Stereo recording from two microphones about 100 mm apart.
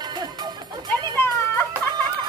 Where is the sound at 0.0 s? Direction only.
45° right (ahead or behind).